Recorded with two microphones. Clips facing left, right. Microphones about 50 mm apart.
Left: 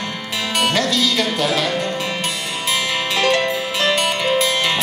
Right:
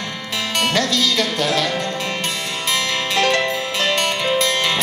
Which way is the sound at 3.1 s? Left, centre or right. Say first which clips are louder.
Even; centre.